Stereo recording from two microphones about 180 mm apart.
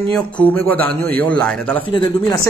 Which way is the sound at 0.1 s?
10° left (ahead or behind).